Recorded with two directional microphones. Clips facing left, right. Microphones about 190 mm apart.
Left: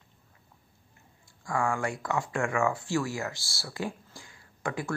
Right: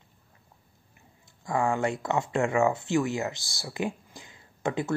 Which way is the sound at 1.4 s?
20° right (ahead or behind).